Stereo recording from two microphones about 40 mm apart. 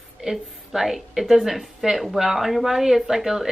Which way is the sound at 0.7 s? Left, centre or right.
Centre.